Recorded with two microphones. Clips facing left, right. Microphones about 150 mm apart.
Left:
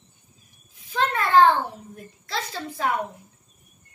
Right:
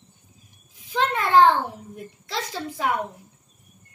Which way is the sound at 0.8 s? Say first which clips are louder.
Right 1 dB; 15° right (ahead or behind).